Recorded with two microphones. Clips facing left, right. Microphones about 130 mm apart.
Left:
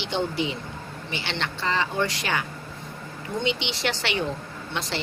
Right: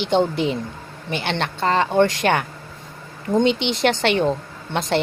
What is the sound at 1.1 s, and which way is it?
A woman's voice, 50° right (ahead or behind).